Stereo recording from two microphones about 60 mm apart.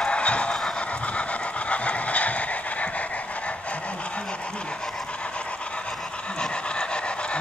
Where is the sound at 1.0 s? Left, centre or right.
Left.